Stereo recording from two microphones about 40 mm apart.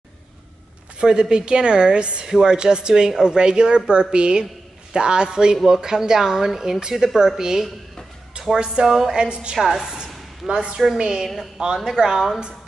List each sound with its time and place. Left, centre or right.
0.9 s a woman's voice: right
8.6 s a woman's voice: centre
11.2 s speech: centre